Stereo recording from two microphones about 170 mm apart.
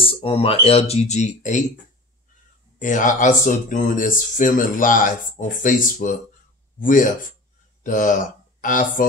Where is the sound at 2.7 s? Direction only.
45° left (ahead or behind).